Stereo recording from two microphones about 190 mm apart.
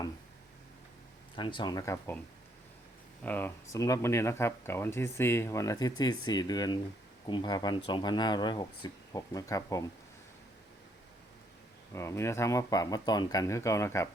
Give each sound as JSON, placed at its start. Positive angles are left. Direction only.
{"t": 1.4, "sound": "speech", "side_deg": 25}
{"t": 3.2, "sound": "speech", "side_deg": 10}
{"t": 11.9, "sound": "speech", "side_deg": 15}